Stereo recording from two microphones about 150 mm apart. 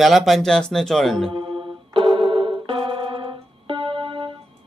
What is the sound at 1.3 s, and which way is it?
Music, 35° right (ahead or behind).